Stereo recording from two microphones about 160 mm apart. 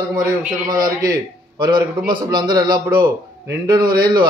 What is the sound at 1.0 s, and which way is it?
A man's voice, 25° right (ahead or behind).